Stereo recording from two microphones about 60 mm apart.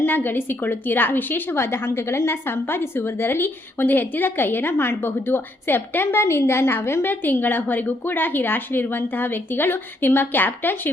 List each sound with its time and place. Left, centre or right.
0.0 s a woman's voice: left
7.1 s a woman's voice: left